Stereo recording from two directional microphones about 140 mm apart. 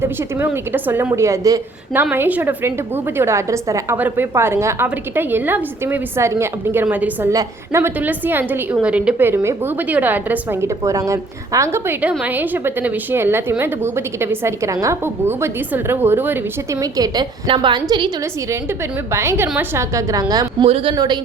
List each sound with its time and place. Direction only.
0.0 s a woman's voice: 15° right (ahead or behind)
16.8 s a woman's voice: 30° right (ahead or behind)
19.1 s a woman's voice: 20° right (ahead or behind)
20.7 s speech: 45° right (ahead or behind)
20.9 s a woman's voice: 30° right (ahead or behind)